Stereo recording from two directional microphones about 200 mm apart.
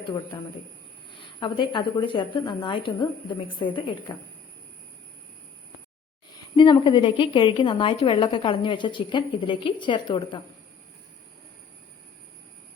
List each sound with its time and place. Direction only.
0.0 s a woman's voice: 20° left (ahead or behind)
6.6 s a woman's voice: 25° left (ahead or behind)